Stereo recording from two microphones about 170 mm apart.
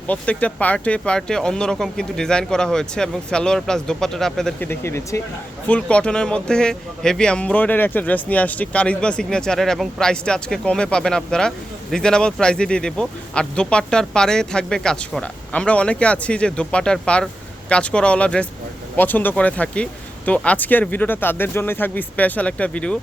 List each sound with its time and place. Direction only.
0.1 s speech: 10° left (ahead or behind)
4.7 s speech: 15° left (ahead or behind)